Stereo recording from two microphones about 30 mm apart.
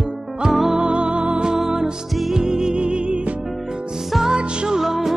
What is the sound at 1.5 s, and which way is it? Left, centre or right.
Music, right.